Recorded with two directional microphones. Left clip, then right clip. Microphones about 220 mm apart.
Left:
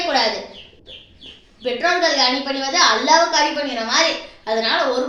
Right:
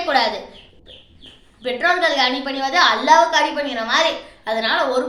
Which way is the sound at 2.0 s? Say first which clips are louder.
Even; 20° right (ahead or behind).